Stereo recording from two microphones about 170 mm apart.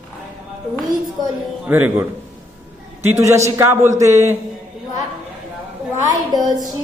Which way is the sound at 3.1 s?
15° right (ahead or behind).